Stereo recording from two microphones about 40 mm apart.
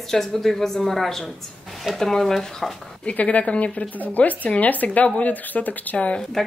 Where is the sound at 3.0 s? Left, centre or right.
Left.